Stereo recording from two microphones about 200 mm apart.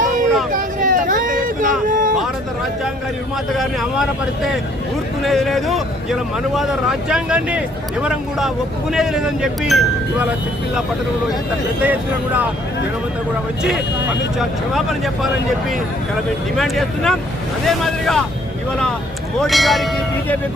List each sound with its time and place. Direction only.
0.5 s a sound: 40° right (ahead or behind)
5.2 s speech: centre (ahead or behind)
11.8 s speech: 10° right (ahead or behind)
13.6 s speech: 5° right (ahead or behind)
16.6 s speech: centre (ahead or behind)
19.4 s speech: centre (ahead or behind)